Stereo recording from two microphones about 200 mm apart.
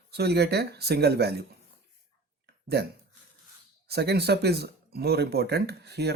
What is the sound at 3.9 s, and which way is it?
Speech, 55° right (ahead or behind).